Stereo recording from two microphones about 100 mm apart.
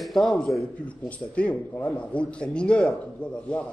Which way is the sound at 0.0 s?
5° left (ahead or behind).